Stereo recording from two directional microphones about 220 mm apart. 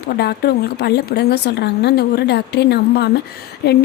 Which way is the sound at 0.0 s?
50° left (ahead or behind).